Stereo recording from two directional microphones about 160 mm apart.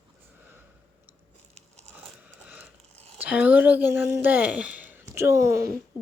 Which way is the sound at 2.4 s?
10° right (ahead or behind).